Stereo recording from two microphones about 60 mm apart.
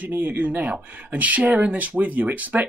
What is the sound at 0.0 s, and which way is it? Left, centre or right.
Speech, right.